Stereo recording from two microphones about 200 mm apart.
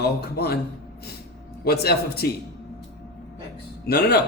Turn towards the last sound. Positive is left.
turn(degrees=50)  # may be behind; listen again after turning